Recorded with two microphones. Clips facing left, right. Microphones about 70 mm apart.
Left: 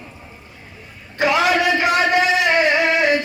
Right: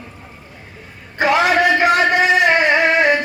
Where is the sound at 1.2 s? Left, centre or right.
Right.